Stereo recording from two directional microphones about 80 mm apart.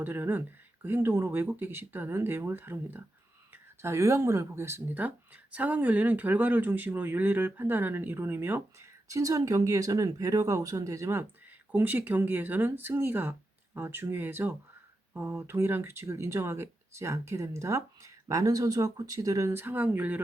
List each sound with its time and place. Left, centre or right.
0.0 s speech: right
5.0 s speech: right
9.0 s speech: right
11.7 s speech: right
19.5 s speech: right